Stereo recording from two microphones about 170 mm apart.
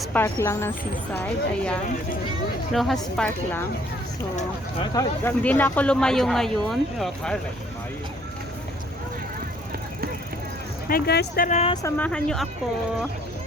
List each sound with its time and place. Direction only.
0.0 s speech: 10° left (ahead or behind)
5.2 s speech: 10° left (ahead or behind)
10.8 s speech: 65° left (ahead or behind)
11.4 s speech: 40° left (ahead or behind)
11.7 s speech: 20° left (ahead or behind)
11.9 s speech: 5° left (ahead or behind)